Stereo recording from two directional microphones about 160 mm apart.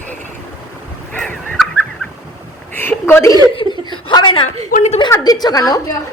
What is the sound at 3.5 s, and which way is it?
Laughter, 30° left (ahead or behind).